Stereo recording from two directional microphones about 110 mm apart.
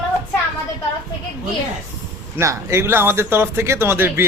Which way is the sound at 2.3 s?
25° right (ahead or behind).